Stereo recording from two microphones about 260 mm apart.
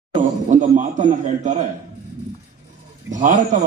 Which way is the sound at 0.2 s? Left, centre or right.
Right.